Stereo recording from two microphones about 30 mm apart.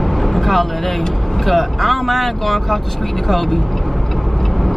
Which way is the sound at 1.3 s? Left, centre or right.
Centre.